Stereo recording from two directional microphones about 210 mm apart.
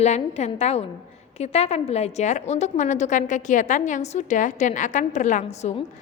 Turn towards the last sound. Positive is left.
turn(degrees=30)  # may be behind; listen again after turning